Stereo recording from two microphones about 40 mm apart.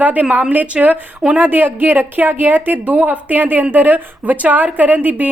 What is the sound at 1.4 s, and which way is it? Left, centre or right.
Speech, right.